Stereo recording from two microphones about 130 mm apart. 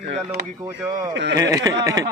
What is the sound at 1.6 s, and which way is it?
Speech, 25° right (ahead or behind).